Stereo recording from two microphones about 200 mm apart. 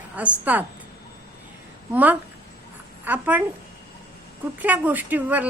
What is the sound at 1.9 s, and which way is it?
A woman's voice, 10° right (ahead or behind).